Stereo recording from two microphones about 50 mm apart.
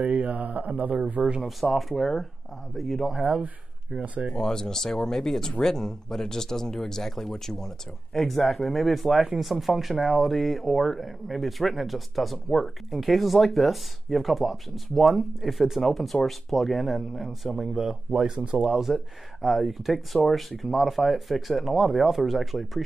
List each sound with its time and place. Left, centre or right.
0.1 s speech: right
1.4 s speech: centre
4.0 s speech: right
4.3 s speech: centre
17.7 s speech: centre
18.9 s speech: centre